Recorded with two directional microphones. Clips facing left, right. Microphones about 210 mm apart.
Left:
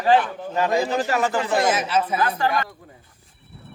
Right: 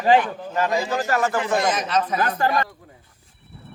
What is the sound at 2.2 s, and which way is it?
Speech, 40° right (ahead or behind).